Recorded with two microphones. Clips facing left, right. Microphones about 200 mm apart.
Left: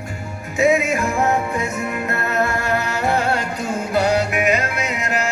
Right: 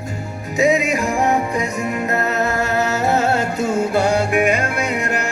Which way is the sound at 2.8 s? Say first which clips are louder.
Right 4 dB; 40° right (ahead or behind).